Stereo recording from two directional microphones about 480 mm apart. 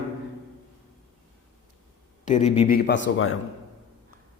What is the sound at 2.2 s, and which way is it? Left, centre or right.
A man's voice, centre.